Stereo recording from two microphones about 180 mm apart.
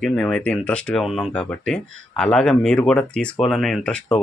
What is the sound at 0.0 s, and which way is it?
Speech, 5° left (ahead or behind).